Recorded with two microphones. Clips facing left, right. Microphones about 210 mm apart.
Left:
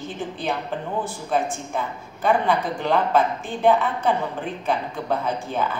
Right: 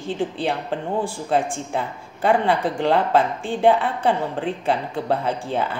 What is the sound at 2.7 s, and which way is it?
Speech, 75° right (ahead or behind).